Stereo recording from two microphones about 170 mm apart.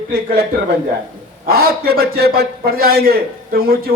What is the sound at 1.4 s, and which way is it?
A man's voice, 65° right (ahead or behind).